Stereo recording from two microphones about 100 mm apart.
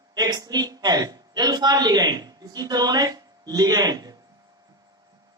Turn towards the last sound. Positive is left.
turn(degrees=-40)  # may be behind; listen again after turning